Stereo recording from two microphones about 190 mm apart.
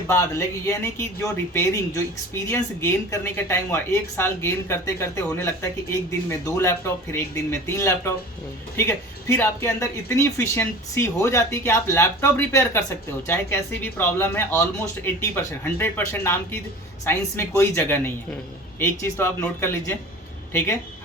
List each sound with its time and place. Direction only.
0.1 s a man's voice: 15° left (ahead or behind)